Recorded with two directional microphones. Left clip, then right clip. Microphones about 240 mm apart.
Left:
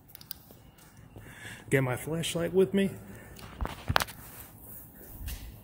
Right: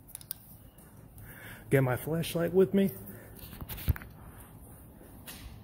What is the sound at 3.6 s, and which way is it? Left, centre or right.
Walk, centre.